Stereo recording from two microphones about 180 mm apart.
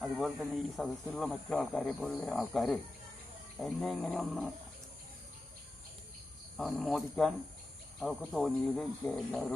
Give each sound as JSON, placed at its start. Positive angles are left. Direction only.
{"t": 0.0, "sound": "speech", "side_deg": 0}
{"t": 6.6, "sound": "speech", "side_deg": 0}